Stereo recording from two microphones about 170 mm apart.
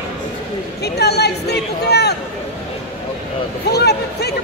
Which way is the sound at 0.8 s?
75° left (ahead or behind).